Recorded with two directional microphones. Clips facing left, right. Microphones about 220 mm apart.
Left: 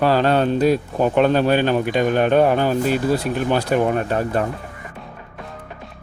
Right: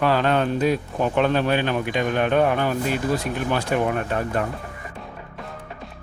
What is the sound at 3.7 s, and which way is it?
Speech, 40° left (ahead or behind).